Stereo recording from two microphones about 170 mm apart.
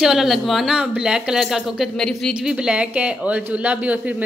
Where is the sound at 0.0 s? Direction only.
Centre (ahead or behind).